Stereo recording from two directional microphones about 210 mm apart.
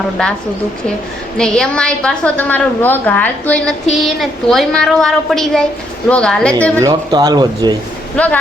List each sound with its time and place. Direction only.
1.4 s a woman's voice: 5° left (ahead or behind)
6.7 s speech: 15° right (ahead or behind)
8.1 s speech: 5° left (ahead or behind)